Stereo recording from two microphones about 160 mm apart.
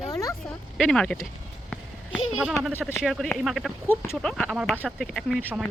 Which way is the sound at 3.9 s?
15° left (ahead or behind).